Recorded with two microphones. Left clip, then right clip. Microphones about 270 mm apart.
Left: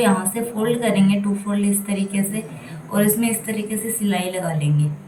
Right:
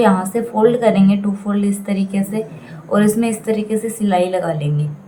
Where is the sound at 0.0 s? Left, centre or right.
Centre.